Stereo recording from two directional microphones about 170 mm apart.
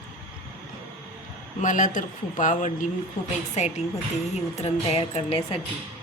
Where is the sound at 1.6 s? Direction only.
50° left (ahead or behind).